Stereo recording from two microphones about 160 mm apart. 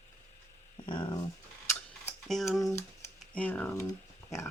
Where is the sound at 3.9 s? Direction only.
15° left (ahead or behind).